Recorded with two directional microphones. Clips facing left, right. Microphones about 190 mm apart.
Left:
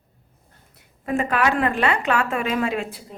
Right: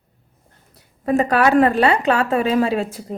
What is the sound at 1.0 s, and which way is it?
A woman's voice, 35° right (ahead or behind).